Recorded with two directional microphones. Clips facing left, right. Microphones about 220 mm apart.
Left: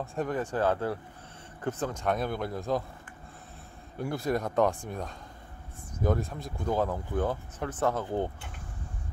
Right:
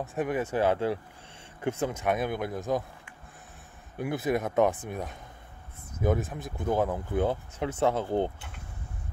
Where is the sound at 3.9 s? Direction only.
5° right (ahead or behind).